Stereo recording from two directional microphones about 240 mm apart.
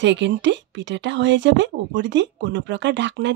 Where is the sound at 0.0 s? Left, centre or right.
Right.